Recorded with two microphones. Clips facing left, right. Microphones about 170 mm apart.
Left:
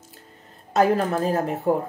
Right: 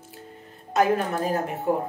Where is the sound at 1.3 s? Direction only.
35° left (ahead or behind).